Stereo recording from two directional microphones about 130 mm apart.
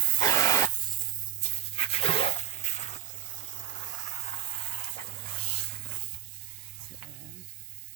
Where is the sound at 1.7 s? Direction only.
50° left (ahead or behind).